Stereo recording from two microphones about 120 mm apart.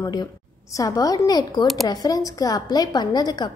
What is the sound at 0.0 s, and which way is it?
A woman's voice, 35° left (ahead or behind).